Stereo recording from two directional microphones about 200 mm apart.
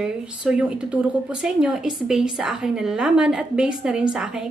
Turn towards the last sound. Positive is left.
turn(degrees=-5)  # may be behind; listen again after turning